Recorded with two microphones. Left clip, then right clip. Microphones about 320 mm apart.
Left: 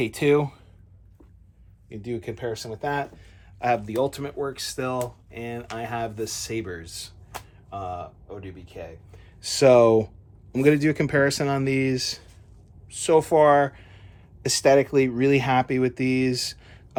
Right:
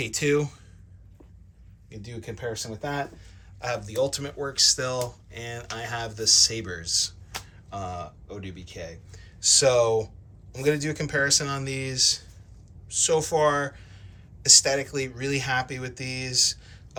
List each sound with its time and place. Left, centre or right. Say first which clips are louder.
0.0 s speech: left 4 dB; centre
1.9 s speech: left 7 dB; left; by 9.2 s centre
9.4 s speech: left 4 dB; centre